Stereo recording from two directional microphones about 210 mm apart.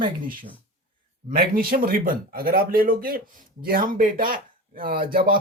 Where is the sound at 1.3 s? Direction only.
45° right (ahead or behind).